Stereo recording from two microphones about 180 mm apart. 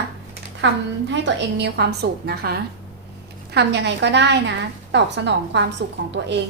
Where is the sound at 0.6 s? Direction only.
80° right.